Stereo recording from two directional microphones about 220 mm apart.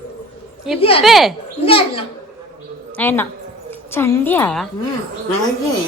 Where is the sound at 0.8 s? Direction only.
25° left (ahead or behind).